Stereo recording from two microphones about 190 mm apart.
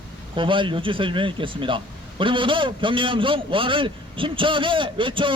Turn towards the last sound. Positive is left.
turn(degrees=-25)  # may be behind; listen again after turning